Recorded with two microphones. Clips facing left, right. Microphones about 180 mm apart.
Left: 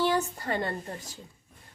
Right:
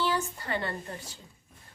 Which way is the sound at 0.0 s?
40° left (ahead or behind).